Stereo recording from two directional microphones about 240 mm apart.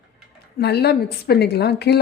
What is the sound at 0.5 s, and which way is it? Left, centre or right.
A woman's voice, left.